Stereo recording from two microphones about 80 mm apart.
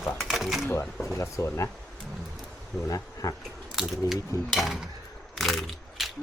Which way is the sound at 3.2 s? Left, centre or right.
Left.